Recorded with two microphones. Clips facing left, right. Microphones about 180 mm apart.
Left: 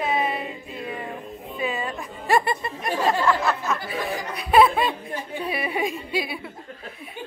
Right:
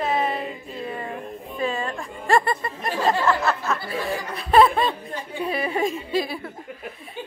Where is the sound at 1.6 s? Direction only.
5° left (ahead or behind).